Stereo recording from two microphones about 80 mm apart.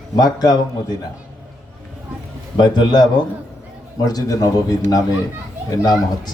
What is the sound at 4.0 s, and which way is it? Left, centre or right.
Speech, left.